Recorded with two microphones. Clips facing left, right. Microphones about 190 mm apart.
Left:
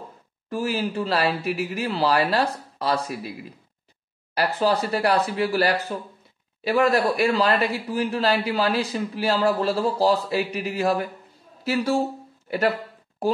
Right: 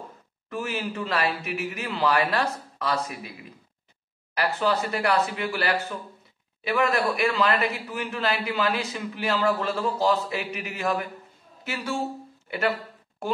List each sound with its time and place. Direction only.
0.5 s speech: 35° left (ahead or behind)
4.4 s speech: 35° left (ahead or behind)